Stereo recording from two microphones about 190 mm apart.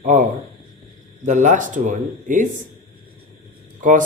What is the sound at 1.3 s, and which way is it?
Speech, 40° right (ahead or behind).